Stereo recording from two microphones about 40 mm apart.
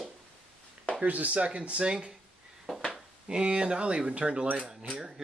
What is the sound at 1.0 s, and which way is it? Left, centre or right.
Speech, right.